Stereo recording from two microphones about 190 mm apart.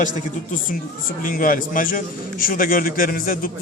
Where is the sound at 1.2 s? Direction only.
45° left (ahead or behind).